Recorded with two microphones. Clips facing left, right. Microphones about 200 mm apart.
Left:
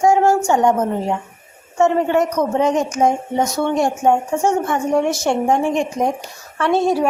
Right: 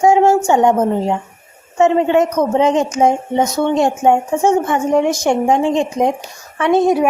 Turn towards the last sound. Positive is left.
turn(degrees=-20)  # may be behind; listen again after turning